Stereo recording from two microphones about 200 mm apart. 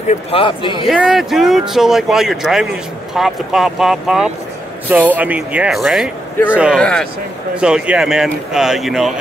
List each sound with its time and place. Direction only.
0.3 s a man's voice: 25° left (ahead or behind)
0.8 s speech: 5° right (ahead or behind)